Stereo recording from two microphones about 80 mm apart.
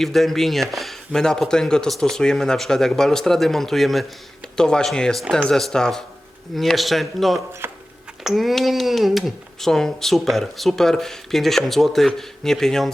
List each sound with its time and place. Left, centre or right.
0.0 s speech: centre
7.6 s a sound: right
8.2 s speech: centre